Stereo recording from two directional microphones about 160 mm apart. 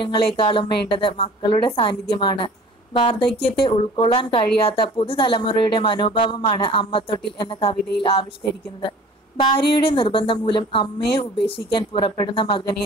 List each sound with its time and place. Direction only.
0.0 s a woman's voice: 30° left (ahead or behind)
9.4 s a woman's voice: 30° left (ahead or behind)